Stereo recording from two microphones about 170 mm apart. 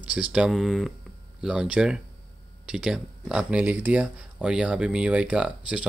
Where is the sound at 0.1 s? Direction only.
5° right (ahead or behind).